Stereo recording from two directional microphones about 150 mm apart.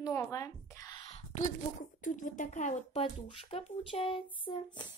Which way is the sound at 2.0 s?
60° left (ahead or behind).